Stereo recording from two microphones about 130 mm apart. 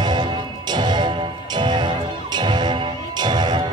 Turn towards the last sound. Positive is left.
turn(degrees=-35)  # may be behind; listen again after turning